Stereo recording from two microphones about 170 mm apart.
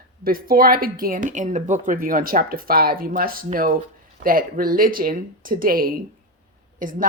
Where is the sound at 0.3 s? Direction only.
60° right (ahead or behind).